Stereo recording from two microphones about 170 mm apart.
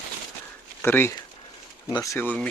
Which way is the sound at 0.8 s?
10° left (ahead or behind).